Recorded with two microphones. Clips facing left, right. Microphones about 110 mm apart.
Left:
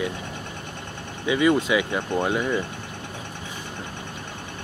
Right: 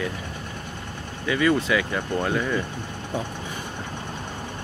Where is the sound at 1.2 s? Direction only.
15° left (ahead or behind).